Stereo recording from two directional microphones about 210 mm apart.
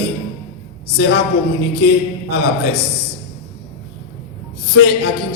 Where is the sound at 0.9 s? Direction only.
50° left (ahead or behind).